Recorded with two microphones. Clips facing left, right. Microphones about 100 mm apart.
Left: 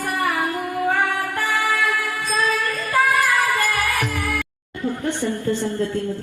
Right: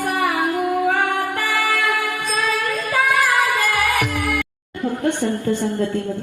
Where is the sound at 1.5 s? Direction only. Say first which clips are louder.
Even; 65° right (ahead or behind).